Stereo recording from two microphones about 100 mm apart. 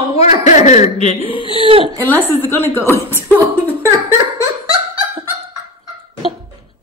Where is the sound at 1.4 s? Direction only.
65° right (ahead or behind).